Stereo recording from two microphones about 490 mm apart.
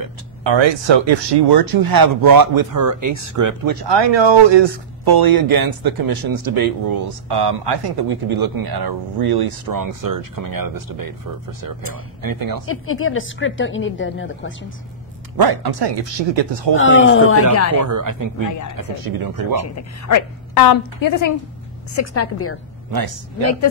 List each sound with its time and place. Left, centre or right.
0.4 s speech: right
3.9 s speech: right
12.2 s speech: right
12.6 s a woman's voice: left
15.3 s speech: right
15.9 s speech: right
16.7 s a woman's voice: left
17.7 s speech: right
19.5 s a woman's voice: left
21.9 s a woman's voice: left
22.8 s speech: right